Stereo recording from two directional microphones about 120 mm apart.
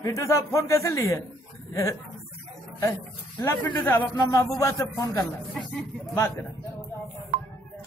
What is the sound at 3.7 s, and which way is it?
A man's voice, 20° left (ahead or behind).